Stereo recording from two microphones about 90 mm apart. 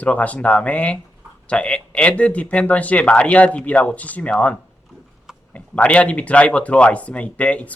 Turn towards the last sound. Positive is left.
turn(degrees=15)  # may be behind; listen again after turning